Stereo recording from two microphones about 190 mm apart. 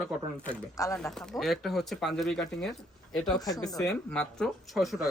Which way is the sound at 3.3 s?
20° left (ahead or behind).